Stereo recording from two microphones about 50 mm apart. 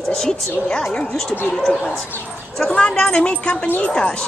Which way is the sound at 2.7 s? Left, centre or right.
Left.